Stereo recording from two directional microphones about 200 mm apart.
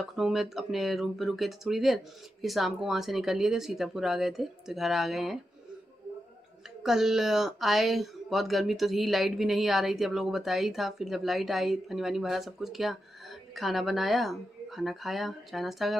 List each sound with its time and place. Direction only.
0.1 s speech: centre (ahead or behind)
6.8 s speech: centre (ahead or behind)